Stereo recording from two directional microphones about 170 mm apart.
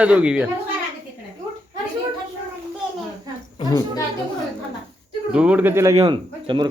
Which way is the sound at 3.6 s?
30° left (ahead or behind).